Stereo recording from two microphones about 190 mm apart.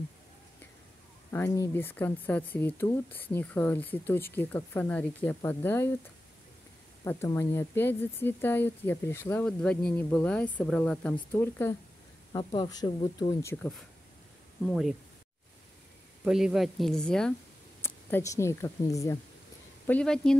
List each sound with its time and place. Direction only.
1.3 s speech: 15° left (ahead or behind)
7.1 s speech: 15° left (ahead or behind)
12.3 s speech: 25° left (ahead or behind)
14.6 s speech: centre (ahead or behind)
16.3 s speech: centre (ahead or behind)
17.8 s speech: 15° left (ahead or behind)
19.9 s speech: 5° left (ahead or behind)